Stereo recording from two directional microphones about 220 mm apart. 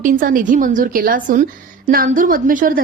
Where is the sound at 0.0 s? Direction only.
40° right (ahead or behind).